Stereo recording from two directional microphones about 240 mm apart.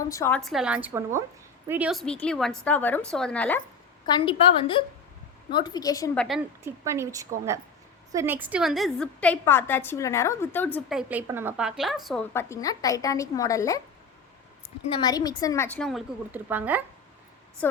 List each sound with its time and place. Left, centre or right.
0.1 s a woman's voice: centre
4.0 s a woman's voice: centre
6.1 s a woman's voice: centre
6.7 s a woman's voice: centre
12.3 s a woman's voice: centre
14.8 s a woman's voice: centre
17.6 s a woman's voice: centre